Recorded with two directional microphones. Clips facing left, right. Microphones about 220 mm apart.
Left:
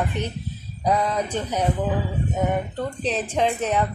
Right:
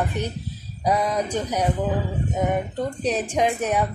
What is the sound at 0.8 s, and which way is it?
Speech, 10° right (ahead or behind).